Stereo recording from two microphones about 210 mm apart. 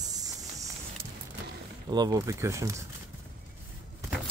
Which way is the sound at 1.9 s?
20° right (ahead or behind).